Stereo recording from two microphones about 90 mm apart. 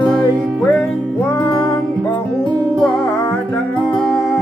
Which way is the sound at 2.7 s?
5° left (ahead or behind).